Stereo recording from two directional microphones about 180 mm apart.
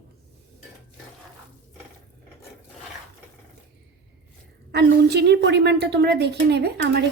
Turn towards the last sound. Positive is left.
turn(degrees=-70)  # may be behind; listen again after turning